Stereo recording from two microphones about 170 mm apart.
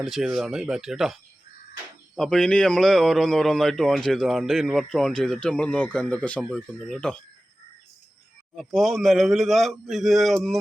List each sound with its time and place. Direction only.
0.0 s a man's voice: centre (ahead or behind)
8.5 s a man's voice: centre (ahead or behind)